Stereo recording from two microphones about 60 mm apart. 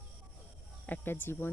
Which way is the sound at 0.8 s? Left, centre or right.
Left.